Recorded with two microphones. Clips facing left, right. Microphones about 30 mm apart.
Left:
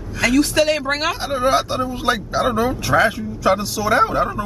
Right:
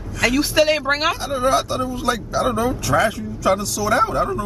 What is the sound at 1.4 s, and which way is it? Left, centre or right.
Speech, left.